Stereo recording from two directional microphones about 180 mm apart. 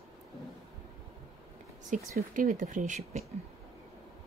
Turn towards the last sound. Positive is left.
turn(degrees=-45)  # may be behind; listen again after turning